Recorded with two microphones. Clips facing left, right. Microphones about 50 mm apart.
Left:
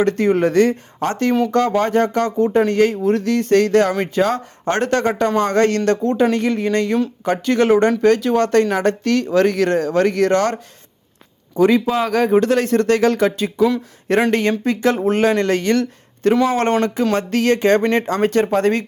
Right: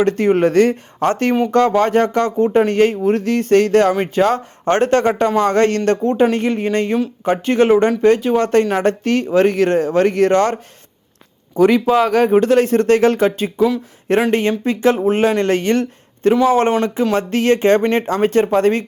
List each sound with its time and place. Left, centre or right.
0.0 s speech: right
7.7 s speech: centre
8.0 s speech: right
11.5 s speech: right
16.3 s speech: centre
17.2 s speech: right